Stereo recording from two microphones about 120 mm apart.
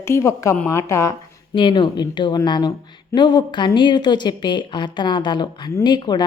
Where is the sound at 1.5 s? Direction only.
40° left (ahead or behind).